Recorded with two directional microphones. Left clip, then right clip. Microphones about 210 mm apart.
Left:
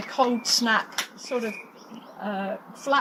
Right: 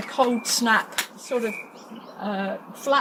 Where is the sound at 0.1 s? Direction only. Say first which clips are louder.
Right 1 dB; 10° right (ahead or behind).